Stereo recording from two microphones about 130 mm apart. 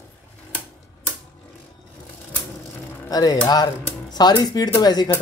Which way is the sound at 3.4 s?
30° left (ahead or behind).